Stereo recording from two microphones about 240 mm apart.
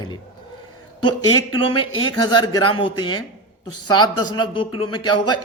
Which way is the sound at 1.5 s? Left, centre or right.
Left.